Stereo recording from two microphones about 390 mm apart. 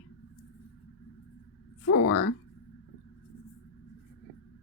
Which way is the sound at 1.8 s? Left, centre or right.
Left.